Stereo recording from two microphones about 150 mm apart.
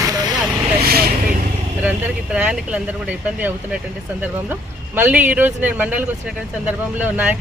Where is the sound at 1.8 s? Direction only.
10° right (ahead or behind).